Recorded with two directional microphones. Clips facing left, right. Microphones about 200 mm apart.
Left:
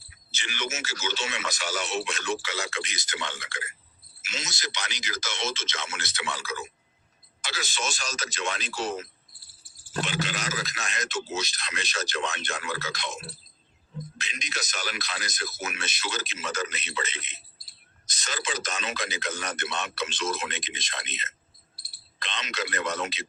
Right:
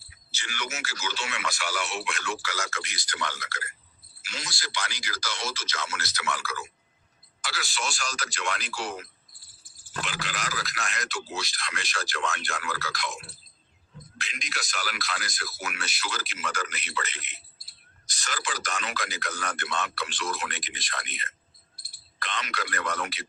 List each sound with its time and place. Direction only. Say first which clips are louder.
0.3 s a man's voice: left 3 dB; 20° left (ahead or behind)